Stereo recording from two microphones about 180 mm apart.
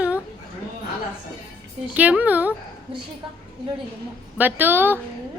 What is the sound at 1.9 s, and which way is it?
Speech, 10° right (ahead or behind).